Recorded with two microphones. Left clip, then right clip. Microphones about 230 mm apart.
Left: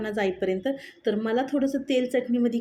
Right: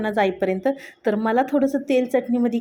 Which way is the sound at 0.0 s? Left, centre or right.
Centre.